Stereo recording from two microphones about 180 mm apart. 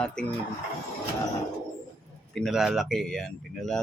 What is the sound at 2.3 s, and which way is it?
Speech, centre (ahead or behind).